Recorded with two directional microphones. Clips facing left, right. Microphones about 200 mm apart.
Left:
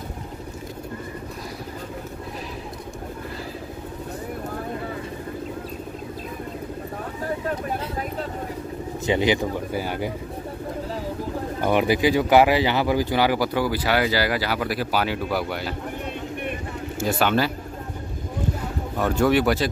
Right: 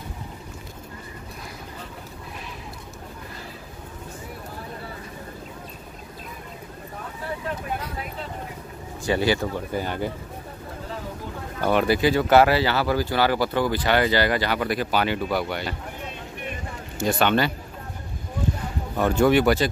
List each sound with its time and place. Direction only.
9.0 s speech: 20° left (ahead or behind)
11.6 s speech: 15° left (ahead or behind)
17.0 s speech: 5° left (ahead or behind)
18.9 s speech: centre (ahead or behind)